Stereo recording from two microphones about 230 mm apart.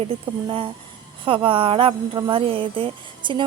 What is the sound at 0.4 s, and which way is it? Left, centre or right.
Speech, right.